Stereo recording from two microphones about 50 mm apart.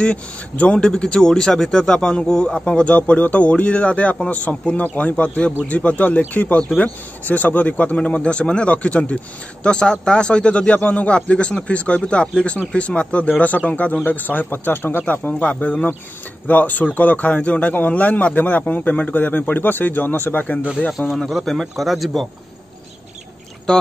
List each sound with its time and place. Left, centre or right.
0.0 s speech: left
21.2 s speech: centre
23.7 s speech: centre